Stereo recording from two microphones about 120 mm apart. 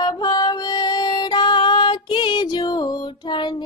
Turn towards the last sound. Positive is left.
turn(degrees=40)  # may be behind; listen again after turning